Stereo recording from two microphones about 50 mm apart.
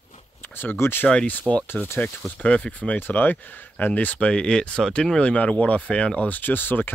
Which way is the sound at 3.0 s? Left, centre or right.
Left.